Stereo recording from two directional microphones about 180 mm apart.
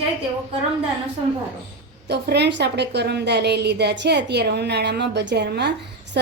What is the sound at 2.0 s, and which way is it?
A woman's voice, 65° right (ahead or behind).